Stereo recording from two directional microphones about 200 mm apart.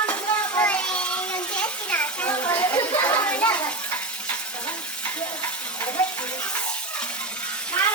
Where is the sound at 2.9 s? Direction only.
10° left (ahead or behind).